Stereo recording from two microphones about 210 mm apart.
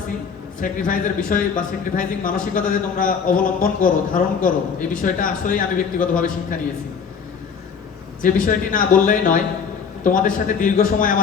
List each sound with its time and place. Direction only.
0.6 s speech: 40° left (ahead or behind)
8.2 s speech: 40° left (ahead or behind)